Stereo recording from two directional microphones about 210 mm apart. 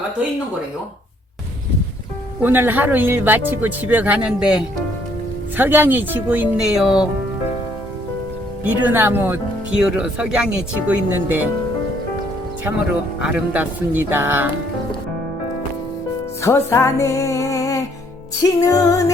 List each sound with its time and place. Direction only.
2.4 s speech: 10° right (ahead or behind)
8.8 s speech: 10° right (ahead or behind)
13.2 s speech: 5° right (ahead or behind)
16.4 s music: 15° left (ahead or behind)